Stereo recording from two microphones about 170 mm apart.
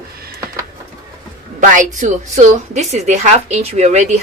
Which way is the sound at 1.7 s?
45° right (ahead or behind).